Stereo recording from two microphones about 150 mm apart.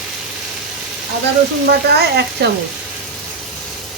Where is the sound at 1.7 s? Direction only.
90° right.